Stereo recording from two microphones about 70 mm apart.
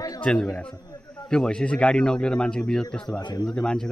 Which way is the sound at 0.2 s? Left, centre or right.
Centre.